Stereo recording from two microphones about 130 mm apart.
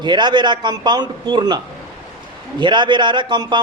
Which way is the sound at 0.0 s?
35° right (ahead or behind).